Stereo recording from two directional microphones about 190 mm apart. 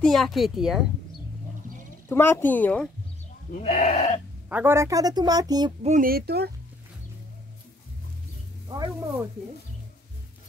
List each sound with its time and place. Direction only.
0.0 s a woman's voice: centre (ahead or behind)
2.0 s speech: 10° left (ahead or behind)
3.5 s speech: 40° left (ahead or behind)
4.5 s a woman's voice: 10° right (ahead or behind)
5.8 s speech: 40° right (ahead or behind); by 6.5 s 55° right (ahead or behind)
8.6 s a woman's voice: 20° right (ahead or behind)